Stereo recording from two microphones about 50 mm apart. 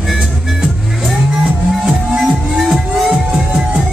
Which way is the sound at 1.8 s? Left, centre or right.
Centre.